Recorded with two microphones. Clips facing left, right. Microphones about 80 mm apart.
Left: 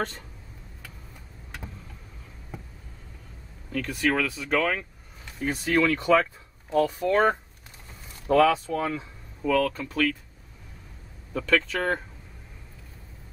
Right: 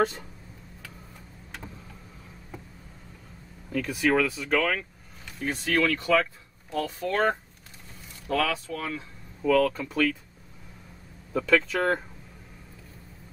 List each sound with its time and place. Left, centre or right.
3.7 s speech: centre
9.4 s speech: centre
11.3 s speech: centre